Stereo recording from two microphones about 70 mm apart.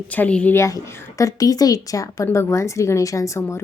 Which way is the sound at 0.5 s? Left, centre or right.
Left.